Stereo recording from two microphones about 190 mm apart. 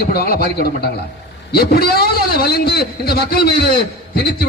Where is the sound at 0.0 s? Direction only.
55° left (ahead or behind).